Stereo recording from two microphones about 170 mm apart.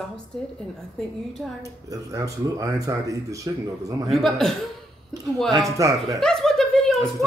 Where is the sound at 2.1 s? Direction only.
20° right (ahead or behind).